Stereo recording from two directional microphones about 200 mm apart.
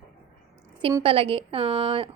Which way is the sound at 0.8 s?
25° right (ahead or behind).